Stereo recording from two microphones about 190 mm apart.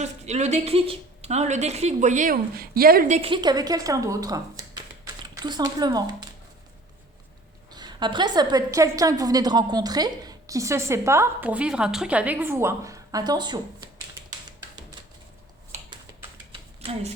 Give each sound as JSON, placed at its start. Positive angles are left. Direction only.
{"t": 0.0, "sound": "a woman's voice", "side_deg": -35}
{"t": 3.2, "sound": "a woman's voice", "side_deg": -25}
{"t": 7.7, "sound": "a woman's voice", "side_deg": -20}
{"t": 16.5, "sound": "a sound", "side_deg": -30}